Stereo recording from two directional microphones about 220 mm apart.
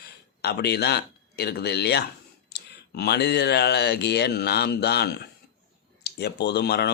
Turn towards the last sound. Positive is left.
turn(degrees=50)  # may be behind; listen again after turning